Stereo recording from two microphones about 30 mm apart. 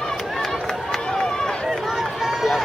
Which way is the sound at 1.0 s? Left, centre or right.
Left.